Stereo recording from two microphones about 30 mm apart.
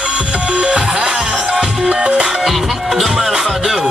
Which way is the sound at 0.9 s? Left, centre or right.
Right.